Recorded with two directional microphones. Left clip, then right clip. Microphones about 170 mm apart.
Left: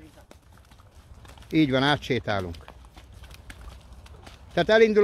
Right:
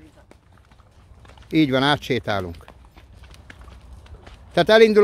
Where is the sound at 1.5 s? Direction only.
25° right (ahead or behind).